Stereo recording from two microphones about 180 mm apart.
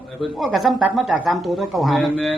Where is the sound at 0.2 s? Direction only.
Centre (ahead or behind).